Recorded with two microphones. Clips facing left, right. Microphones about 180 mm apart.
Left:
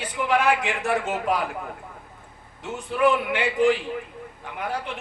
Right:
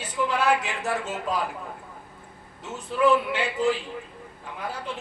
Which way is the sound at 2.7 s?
15° left (ahead or behind).